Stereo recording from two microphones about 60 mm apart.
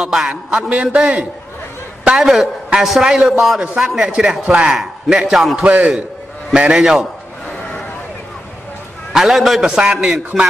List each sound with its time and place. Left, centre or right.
0.0 s a man's voice: centre
2.0 s a man's voice: centre
5.6 s a man's voice: right
9.1 s a man's voice: centre